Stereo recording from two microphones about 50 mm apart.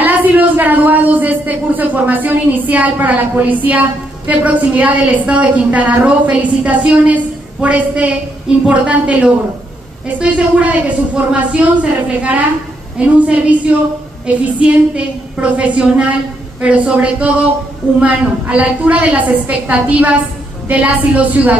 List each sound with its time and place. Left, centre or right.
0.0 s a woman's voice: right